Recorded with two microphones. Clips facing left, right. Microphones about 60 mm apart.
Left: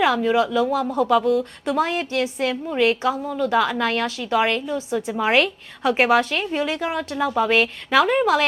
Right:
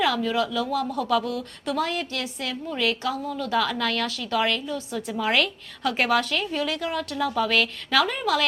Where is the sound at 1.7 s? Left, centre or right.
Left.